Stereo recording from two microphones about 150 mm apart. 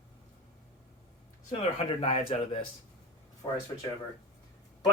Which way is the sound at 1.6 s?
40° left (ahead or behind).